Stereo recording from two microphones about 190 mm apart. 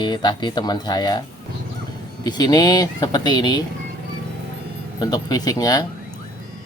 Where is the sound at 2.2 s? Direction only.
20° left (ahead or behind).